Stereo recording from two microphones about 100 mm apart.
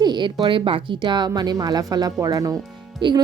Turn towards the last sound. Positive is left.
turn(degrees=-50)  # may be behind; listen again after turning